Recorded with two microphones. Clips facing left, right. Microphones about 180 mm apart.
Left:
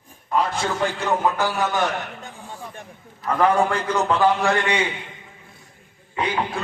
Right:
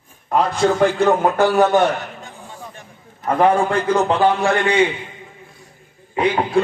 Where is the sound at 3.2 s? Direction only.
25° right (ahead or behind).